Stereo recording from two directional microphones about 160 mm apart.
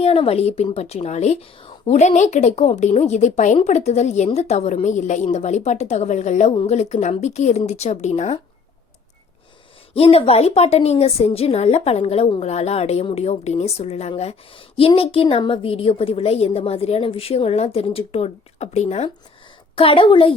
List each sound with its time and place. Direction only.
0.0 s speech: 40° left (ahead or behind)
9.9 s a woman's voice: 40° left (ahead or behind)